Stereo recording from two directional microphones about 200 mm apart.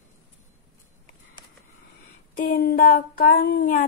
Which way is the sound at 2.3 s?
50° left (ahead or behind).